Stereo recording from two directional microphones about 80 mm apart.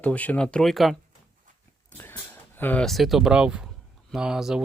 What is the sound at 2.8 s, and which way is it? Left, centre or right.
Speech, centre.